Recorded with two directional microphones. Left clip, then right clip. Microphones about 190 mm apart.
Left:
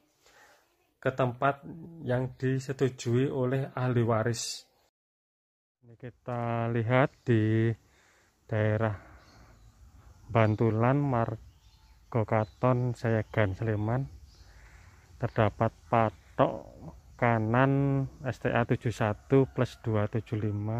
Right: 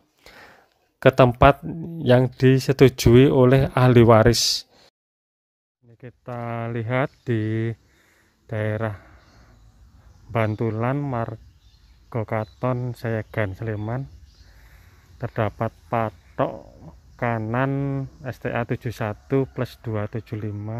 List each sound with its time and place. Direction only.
0.2 s a sound: 45° right (ahead or behind)
0.9 s speech: 45° right (ahead or behind)
5.9 s speech: centre (ahead or behind)
10.3 s speech: 5° left (ahead or behind)
15.1 s speech: 5° left (ahead or behind)